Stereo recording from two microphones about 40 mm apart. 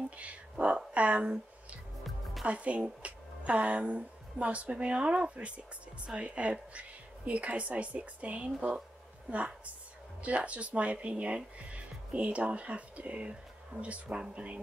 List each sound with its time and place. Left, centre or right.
0.2 s speech: right
2.4 s a woman's voice: right
10.2 s speech: right
14.0 s speech: right
14.3 s speech: right